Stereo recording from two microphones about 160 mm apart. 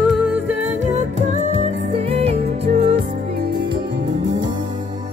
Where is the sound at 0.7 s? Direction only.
45° right (ahead or behind).